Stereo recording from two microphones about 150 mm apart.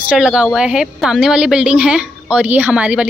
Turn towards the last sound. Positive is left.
turn(degrees=-10)  # may be behind; listen again after turning